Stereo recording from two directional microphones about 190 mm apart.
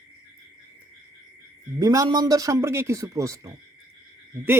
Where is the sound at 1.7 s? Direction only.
20° right (ahead or behind).